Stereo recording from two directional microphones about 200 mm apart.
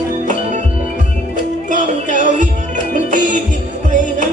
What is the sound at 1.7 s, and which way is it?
Music, 40° right (ahead or behind).